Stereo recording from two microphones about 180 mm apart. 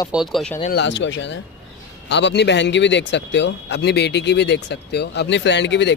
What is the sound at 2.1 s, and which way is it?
Speech, 70° left (ahead or behind).